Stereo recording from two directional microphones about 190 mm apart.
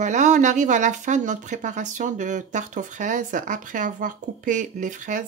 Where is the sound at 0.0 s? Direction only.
40° right (ahead or behind).